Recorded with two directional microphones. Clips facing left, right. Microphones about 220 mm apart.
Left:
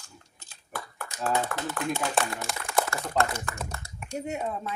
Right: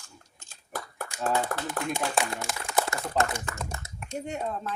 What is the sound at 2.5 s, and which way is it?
Speech, centre (ahead or behind).